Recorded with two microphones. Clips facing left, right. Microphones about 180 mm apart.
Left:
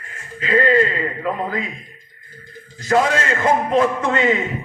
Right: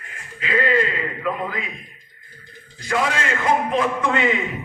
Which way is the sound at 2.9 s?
40° left (ahead or behind).